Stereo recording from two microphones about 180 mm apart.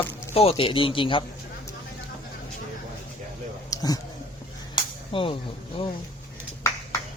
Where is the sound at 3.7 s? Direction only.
20° left (ahead or behind).